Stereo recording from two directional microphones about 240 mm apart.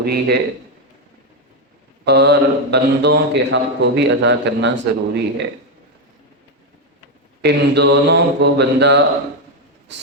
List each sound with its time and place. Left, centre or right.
0.0 s a man's voice: right
2.0 s a man's voice: right
7.4 s a man's voice: right